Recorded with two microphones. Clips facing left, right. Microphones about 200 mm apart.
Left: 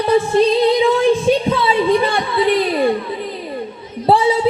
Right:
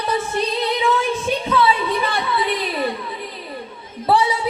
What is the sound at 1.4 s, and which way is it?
Music, 30° left (ahead or behind).